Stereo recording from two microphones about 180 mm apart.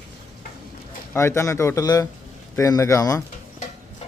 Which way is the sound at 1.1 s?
15° left (ahead or behind).